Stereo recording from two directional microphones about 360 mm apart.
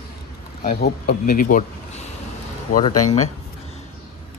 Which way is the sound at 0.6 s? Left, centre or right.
Left.